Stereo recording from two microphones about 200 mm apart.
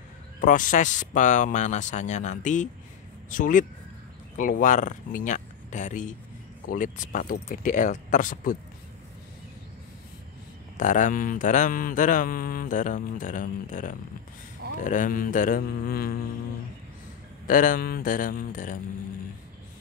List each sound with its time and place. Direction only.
0.4 s mantra: 40° left (ahead or behind)
10.8 s mantra: 40° left (ahead or behind)
14.8 s speech: 40° left (ahead or behind)
17.5 s speech: 45° left (ahead or behind)